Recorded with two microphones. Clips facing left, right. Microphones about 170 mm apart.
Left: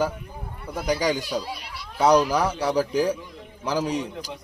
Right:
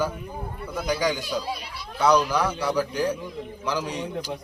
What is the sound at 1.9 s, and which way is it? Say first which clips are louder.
A man's voice: left 2 dB; 35° left (ahead or behind).